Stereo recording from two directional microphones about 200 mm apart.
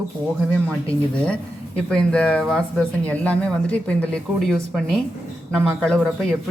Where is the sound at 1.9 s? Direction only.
5° left (ahead or behind).